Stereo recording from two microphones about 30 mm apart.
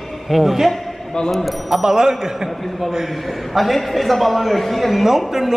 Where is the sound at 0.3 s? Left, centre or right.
Centre.